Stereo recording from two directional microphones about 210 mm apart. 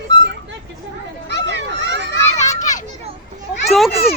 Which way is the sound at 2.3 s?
35° left (ahead or behind).